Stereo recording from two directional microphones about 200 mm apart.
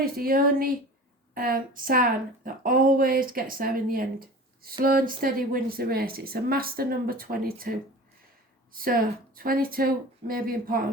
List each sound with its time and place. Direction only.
0.0 s a woman's voice: 45° right (ahead or behind)
8.7 s a woman's voice: 45° right (ahead or behind)